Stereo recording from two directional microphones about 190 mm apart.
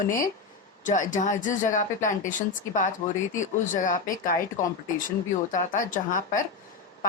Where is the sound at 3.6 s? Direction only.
45° left (ahead or behind).